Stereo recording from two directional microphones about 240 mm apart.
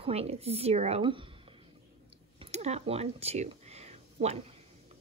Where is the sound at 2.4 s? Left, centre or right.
Right.